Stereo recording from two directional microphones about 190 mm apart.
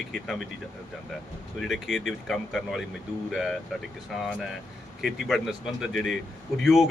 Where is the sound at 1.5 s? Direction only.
Centre (ahead or behind).